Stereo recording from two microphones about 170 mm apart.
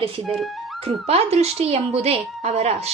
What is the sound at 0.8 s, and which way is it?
Speech, 35° right (ahead or behind).